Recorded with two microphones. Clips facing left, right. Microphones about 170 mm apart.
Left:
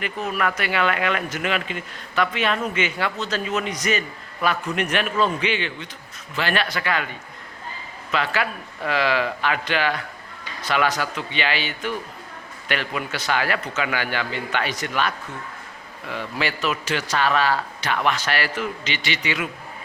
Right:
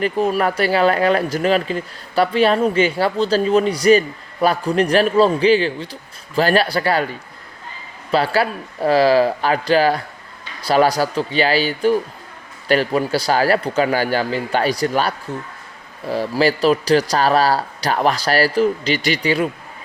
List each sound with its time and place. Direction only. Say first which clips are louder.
0.0 s speech: right 8 dB; 35° right (ahead or behind)